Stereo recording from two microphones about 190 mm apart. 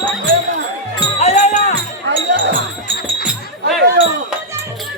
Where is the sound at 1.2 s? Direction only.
35° left (ahead or behind).